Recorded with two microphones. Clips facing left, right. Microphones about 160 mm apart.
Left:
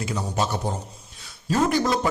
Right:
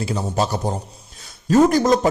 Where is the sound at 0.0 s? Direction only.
35° right (ahead or behind).